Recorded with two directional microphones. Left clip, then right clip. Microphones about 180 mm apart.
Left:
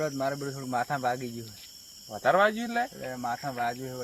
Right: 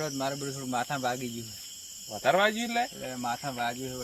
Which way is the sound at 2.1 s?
15° right (ahead or behind).